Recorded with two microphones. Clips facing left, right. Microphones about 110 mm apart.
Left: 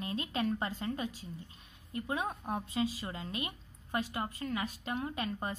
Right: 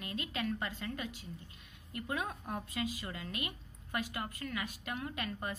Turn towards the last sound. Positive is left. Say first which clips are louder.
# left 3 dB
turn(degrees=30)  # may be behind; listen again after turning